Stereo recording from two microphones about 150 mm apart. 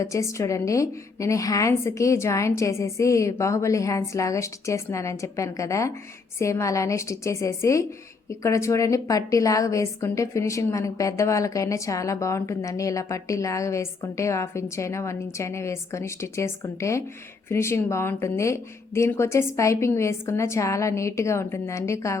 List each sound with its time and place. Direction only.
0.0 s a woman's voice: 20° left (ahead or behind)